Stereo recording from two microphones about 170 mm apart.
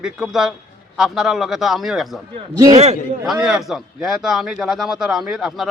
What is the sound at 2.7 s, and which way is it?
Speech, 40° right (ahead or behind).